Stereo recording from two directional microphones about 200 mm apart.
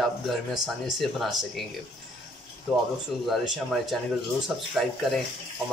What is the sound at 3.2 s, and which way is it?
Speech, centre (ahead or behind).